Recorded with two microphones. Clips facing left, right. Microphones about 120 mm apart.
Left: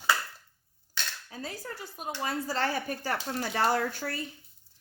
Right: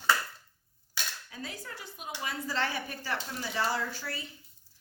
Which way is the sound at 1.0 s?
10° right (ahead or behind).